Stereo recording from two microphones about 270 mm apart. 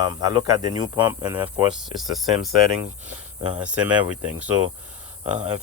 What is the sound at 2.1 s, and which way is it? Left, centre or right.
Speech, centre.